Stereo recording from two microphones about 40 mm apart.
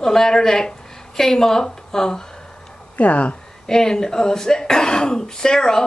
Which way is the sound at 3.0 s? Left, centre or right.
Left.